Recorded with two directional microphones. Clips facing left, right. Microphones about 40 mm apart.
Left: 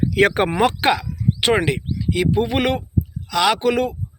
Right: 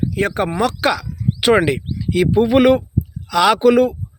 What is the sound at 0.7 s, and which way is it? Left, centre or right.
Speech, centre.